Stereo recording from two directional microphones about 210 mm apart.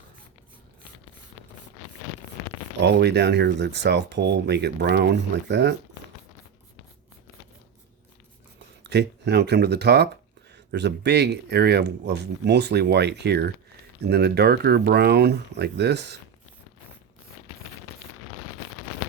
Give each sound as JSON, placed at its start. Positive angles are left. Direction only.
{"t": 2.8, "sound": "speech", "side_deg": -55}
{"t": 8.8, "sound": "speech", "side_deg": -55}